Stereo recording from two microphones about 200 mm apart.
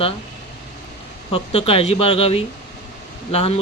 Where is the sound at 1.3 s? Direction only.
30° left (ahead or behind).